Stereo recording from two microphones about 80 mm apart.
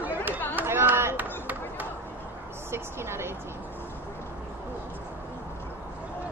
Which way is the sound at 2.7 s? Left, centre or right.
Right.